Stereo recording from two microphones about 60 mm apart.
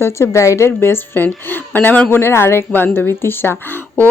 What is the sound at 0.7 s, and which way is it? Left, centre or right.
A woman's voice, left.